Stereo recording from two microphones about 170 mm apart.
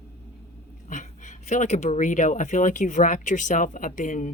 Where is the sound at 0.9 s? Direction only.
45° left (ahead or behind).